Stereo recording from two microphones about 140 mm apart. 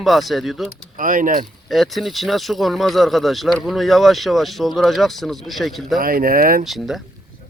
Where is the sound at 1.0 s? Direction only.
75° right (ahead or behind).